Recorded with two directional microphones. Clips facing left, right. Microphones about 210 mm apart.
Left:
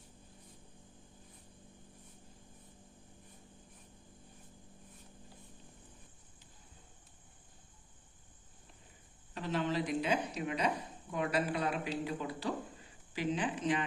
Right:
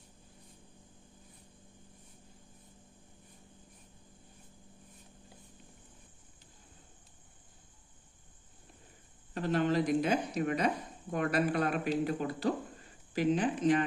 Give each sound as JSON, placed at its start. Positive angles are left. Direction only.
{"t": 9.3, "sound": "a woman's voice", "side_deg": -50}